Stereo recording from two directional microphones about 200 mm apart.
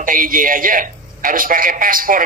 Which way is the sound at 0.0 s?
45° right (ahead or behind).